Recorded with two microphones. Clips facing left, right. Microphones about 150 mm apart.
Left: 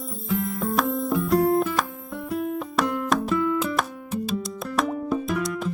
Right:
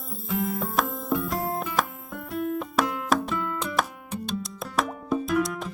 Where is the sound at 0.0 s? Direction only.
Centre (ahead or behind).